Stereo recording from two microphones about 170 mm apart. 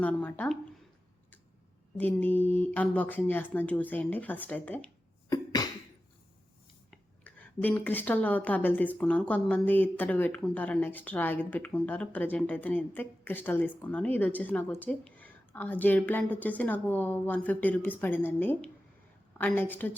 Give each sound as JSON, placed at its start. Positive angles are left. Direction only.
{"t": 0.0, "sound": "a woman's voice", "side_deg": 10}
{"t": 2.0, "sound": "a woman's voice", "side_deg": 10}
{"t": 5.3, "sound": "cough", "side_deg": 25}
{"t": 6.9, "sound": "a woman's voice", "side_deg": 10}